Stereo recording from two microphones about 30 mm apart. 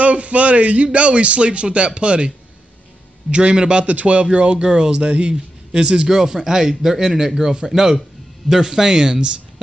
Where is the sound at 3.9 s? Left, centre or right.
Right.